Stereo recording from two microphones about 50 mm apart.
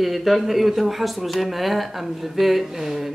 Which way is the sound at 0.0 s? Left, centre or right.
Centre.